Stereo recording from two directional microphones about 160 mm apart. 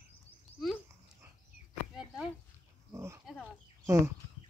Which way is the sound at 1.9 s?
5° right (ahead or behind).